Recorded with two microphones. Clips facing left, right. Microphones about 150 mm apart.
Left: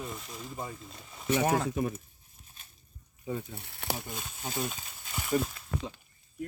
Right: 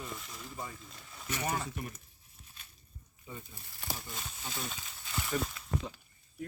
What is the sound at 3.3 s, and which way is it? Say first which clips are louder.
Speech: left 11 dB; 75° left (ahead or behind).